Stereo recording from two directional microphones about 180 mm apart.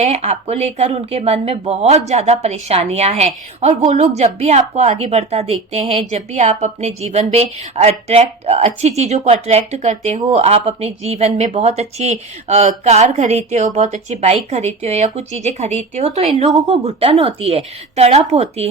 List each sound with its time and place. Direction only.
0.0 s a woman's voice: 35° right (ahead or behind)